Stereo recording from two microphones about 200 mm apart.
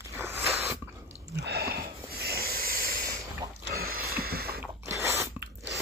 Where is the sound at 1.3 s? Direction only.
55° right (ahead or behind).